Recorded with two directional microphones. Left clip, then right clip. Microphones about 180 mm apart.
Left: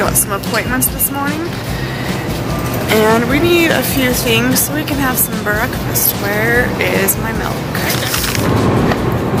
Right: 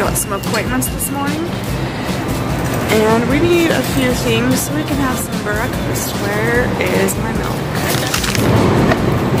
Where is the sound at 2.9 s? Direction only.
Centre (ahead or behind).